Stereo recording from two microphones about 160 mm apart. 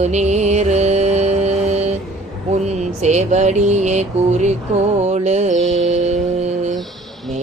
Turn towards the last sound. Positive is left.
turn(degrees=-45)  # may be behind; listen again after turning